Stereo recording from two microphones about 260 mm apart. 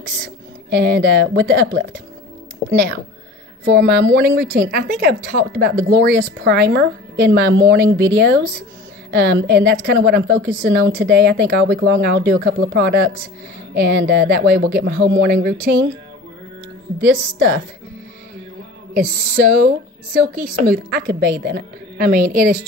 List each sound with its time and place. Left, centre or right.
0.7 s a woman's voice: right
3.6 s a woman's voice: right
17.0 s a woman's voice: right
19.3 s a woman's voice: right